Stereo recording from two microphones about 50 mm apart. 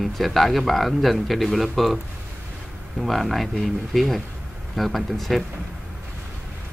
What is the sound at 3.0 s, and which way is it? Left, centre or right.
A man's voice, centre.